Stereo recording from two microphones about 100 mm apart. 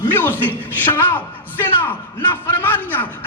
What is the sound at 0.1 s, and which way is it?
A man's voice, 20° left (ahead or behind).